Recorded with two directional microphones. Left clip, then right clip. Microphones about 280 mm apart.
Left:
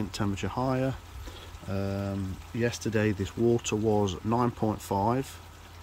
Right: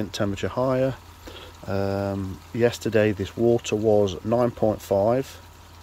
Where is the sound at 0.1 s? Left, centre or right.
Centre.